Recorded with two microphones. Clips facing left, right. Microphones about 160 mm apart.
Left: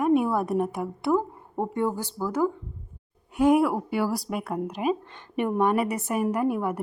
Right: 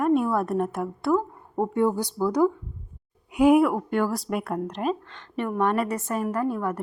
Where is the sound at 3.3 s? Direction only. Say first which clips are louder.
Right 2 dB; 10° right (ahead or behind).